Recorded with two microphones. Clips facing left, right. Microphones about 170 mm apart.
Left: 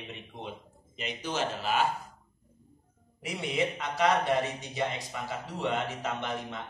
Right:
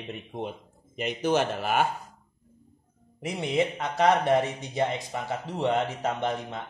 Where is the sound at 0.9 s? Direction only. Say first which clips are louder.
Right 9 dB; 50° right (ahead or behind).